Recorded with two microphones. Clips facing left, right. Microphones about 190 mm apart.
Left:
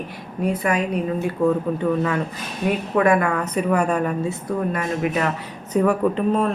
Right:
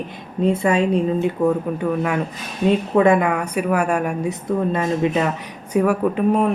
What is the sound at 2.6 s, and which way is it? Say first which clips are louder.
Speech: right 3 dB; 25° right (ahead or behind).